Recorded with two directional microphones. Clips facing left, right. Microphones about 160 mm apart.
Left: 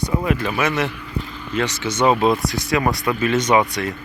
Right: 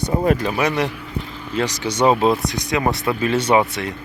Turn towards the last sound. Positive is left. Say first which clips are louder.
# even
turn(degrees=-25)  # may be behind; listen again after turning